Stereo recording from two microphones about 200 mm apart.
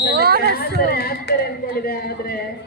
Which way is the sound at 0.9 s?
50° left (ahead or behind).